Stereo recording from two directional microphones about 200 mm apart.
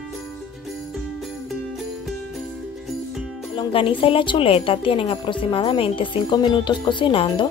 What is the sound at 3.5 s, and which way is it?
Speech, 25° left (ahead or behind).